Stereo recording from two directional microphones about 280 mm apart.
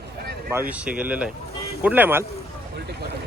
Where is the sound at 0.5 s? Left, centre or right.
Centre.